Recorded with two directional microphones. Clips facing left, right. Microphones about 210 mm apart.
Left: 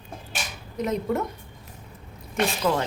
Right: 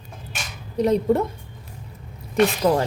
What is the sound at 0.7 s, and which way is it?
Speech, 35° right (ahead or behind).